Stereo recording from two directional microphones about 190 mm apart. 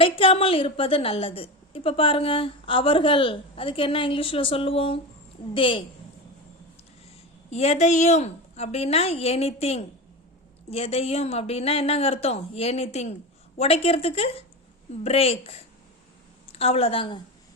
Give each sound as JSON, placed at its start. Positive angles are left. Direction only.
{"t": 0.0, "sound": "a woman's voice", "side_deg": 30}
{"t": 7.5, "sound": "a woman's voice", "side_deg": 35}